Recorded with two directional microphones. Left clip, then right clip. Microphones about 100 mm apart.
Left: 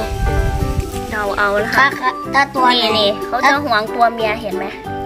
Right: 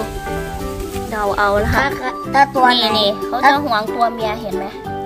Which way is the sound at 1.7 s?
30° right (ahead or behind).